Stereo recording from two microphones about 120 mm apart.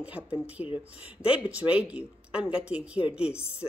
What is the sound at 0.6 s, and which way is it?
Speech, 45° left (ahead or behind).